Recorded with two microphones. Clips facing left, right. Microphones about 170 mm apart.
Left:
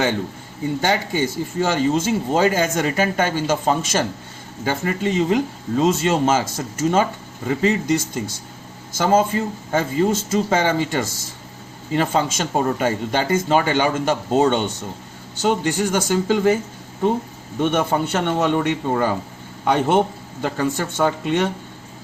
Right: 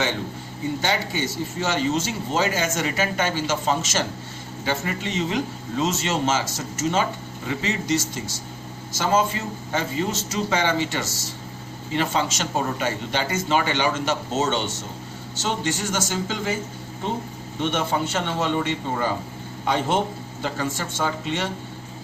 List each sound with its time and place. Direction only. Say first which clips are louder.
0.8 s speech: left 6 dB; 50° left (ahead or behind)
17.6 s a man's voice: left 5 dB; 50° left (ahead or behind)